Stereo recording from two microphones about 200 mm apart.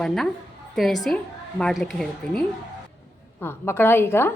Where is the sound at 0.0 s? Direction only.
Centre (ahead or behind).